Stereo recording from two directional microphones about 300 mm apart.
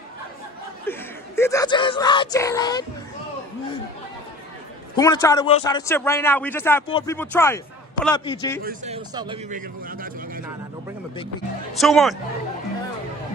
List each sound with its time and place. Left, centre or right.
0.8 s speech: centre
4.9 s a man's voice: centre
8.6 s a man's voice: right
9.5 s speech: right
11.7 s speech: centre